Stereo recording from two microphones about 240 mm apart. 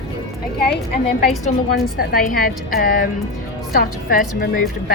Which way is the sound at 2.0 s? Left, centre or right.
Left.